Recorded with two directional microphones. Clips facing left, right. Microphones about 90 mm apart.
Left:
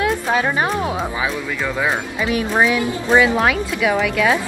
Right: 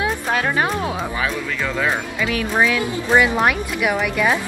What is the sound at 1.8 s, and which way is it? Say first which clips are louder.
Speech: even; 20° left (ahead or behind).